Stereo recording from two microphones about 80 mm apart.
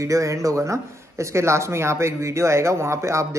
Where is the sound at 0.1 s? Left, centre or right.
Right.